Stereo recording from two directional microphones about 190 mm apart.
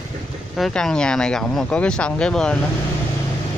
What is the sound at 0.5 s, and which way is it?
Speech, centre (ahead or behind).